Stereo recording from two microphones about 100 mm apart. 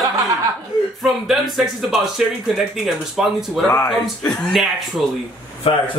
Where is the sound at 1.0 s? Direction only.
Centre (ahead or behind).